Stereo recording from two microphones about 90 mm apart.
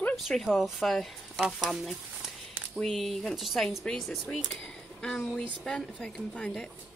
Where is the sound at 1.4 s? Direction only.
5° right (ahead or behind).